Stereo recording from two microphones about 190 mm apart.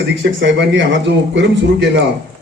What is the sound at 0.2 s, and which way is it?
A man's voice, 70° right (ahead or behind).